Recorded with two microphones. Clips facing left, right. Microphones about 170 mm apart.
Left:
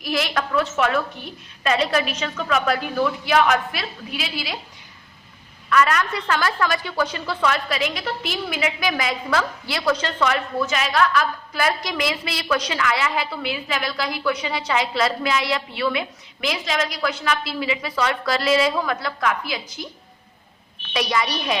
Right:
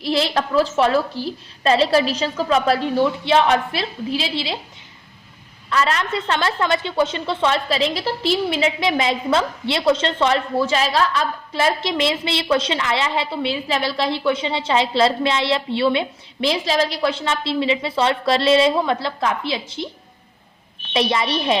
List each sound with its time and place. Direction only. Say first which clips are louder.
0.0 s a woman's voice: right 4 dB; 30° right (ahead or behind)
5.6 s a woman's voice: left 1 dB; 25° right (ahead or behind)
20.9 s a woman's voice: right 3 dB; 25° right (ahead or behind)